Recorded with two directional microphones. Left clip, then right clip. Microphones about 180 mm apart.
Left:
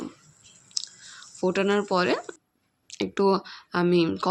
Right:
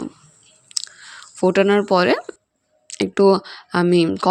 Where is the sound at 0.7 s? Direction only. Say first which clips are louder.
Right 5 dB; 45° right (ahead or behind).